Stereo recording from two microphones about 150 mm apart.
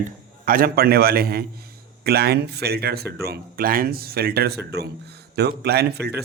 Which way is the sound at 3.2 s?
80° right.